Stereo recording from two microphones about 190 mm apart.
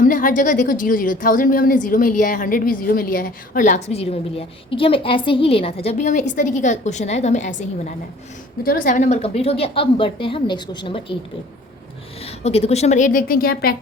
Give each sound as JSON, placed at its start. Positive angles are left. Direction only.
{"t": 0.0, "sound": "a woman's voice", "side_deg": 45}
{"t": 12.2, "sound": "a woman's voice", "side_deg": 35}